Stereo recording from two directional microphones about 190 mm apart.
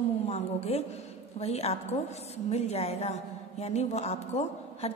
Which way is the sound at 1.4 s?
35° left (ahead or behind).